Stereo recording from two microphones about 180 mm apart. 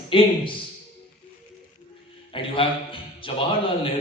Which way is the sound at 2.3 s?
30° left (ahead or behind).